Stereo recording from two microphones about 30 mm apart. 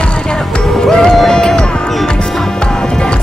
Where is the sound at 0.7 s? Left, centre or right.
Centre.